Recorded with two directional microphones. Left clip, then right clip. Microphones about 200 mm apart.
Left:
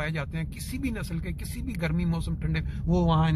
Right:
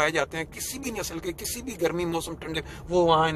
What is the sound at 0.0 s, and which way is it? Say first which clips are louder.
Speech: right 9 dB; 15° right (ahead or behind).